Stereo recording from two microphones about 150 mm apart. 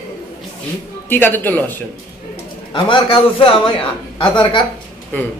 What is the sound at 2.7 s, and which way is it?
A man's voice, 35° left (ahead or behind).